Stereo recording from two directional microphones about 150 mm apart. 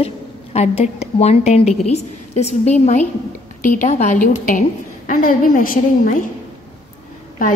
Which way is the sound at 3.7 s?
55° left (ahead or behind).